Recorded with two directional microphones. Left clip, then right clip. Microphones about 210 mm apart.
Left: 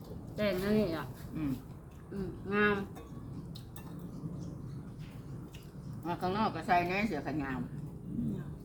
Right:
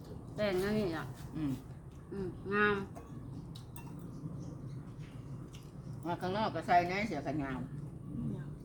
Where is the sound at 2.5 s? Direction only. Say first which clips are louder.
Left 1 dB; 5° right (ahead or behind).